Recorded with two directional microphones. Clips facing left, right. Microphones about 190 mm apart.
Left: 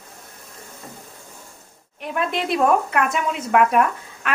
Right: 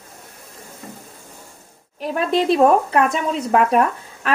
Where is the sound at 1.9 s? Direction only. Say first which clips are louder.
Right 5 dB; 35° right (ahead or behind).